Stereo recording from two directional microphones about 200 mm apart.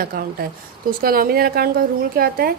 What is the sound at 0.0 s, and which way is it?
A woman's voice, 45° right (ahead or behind).